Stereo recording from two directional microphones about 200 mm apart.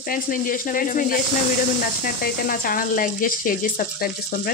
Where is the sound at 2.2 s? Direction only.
45° left (ahead or behind).